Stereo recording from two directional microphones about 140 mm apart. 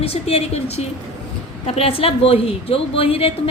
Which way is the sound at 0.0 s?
45° left (ahead or behind).